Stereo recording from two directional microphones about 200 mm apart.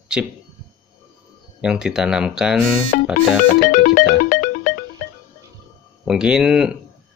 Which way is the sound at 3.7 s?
45° left (ahead or behind).